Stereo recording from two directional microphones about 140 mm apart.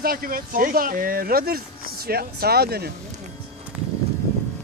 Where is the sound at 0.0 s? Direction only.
90° right.